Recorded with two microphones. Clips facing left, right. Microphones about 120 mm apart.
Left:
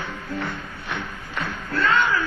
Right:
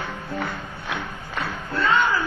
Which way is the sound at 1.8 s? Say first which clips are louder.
Even; centre (ahead or behind).